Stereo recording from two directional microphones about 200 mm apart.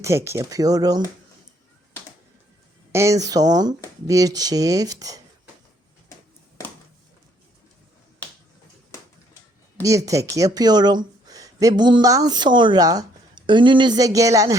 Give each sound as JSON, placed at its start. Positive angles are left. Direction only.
{"t": 0.0, "sound": "speech", "side_deg": -15}
{"t": 2.9, "sound": "speech", "side_deg": -15}
{"t": 9.8, "sound": "speech", "side_deg": -15}